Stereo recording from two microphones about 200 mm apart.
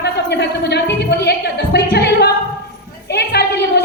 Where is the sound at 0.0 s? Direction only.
55° left (ahead or behind).